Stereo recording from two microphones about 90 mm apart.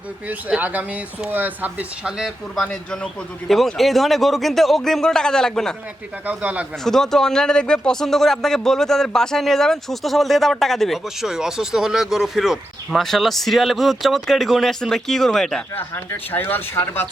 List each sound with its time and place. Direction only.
0.3 s speech: 20° right (ahead or behind)
2.6 s a man's voice: 10° left (ahead or behind)
6.2 s speech: 15° right (ahead or behind)
6.8 s speech: 5° left (ahead or behind)
15.7 s speech: 20° left (ahead or behind)